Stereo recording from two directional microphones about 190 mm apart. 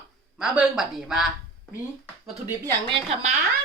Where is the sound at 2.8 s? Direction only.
25° right (ahead or behind).